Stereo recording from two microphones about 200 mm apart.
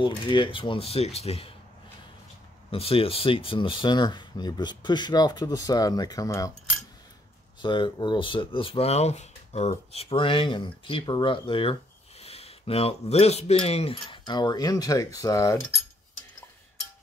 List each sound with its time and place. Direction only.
0.0 s speech: 25° left (ahead or behind)
2.7 s speech: 30° left (ahead or behind)
7.6 s speech: 25° left (ahead or behind)